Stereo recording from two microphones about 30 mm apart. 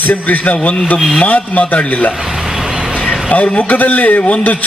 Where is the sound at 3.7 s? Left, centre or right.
Left.